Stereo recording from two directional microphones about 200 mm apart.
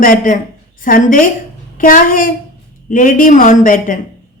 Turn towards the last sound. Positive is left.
turn(degrees=45)  # may be behind; listen again after turning